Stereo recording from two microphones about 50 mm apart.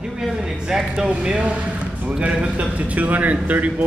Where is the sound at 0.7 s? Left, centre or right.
Centre.